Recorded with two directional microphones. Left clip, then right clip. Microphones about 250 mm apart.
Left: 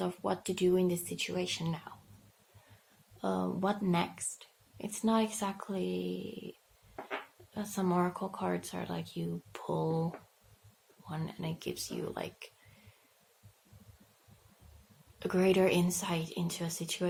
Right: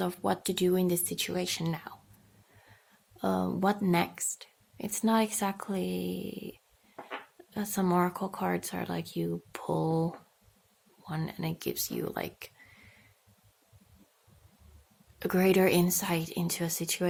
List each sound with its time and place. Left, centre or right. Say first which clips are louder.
0.0 s speech: right 4 dB; right
3.2 s speech: right 4 dB; right
15.2 s speech: right 3 dB; right